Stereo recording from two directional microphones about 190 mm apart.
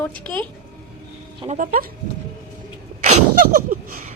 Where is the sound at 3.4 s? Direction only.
45° right (ahead or behind).